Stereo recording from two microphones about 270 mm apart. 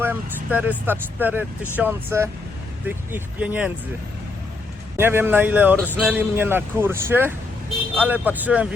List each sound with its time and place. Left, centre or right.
0.0 s speech: centre
4.9 s speech: centre